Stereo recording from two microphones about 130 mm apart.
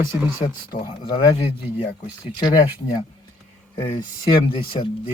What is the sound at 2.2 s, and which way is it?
Speech, 35° left (ahead or behind).